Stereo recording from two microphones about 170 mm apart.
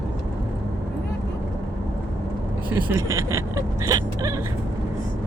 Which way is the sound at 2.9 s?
20° right (ahead or behind).